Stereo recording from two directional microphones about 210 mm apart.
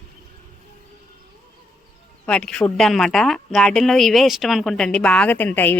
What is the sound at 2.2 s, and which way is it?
A woman's voice, 5° left (ahead or behind).